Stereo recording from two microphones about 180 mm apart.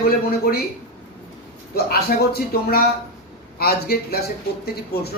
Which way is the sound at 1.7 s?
60° left (ahead or behind).